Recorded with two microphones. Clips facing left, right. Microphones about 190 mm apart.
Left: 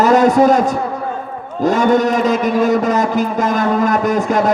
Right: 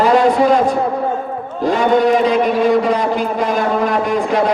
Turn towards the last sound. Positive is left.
turn(degrees=45)  # may be behind; listen again after turning